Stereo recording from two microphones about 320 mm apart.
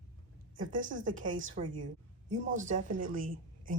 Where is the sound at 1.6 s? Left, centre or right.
Right.